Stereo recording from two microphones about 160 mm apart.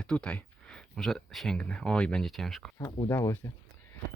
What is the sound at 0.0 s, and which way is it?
Speech, 5° left (ahead or behind).